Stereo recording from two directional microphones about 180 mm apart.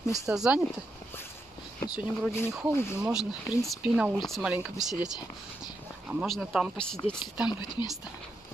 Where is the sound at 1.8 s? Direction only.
15° left (ahead or behind).